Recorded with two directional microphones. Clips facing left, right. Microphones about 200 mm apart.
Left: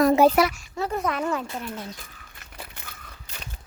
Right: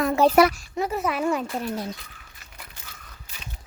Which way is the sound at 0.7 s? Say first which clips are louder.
Even; 10° right (ahead or behind).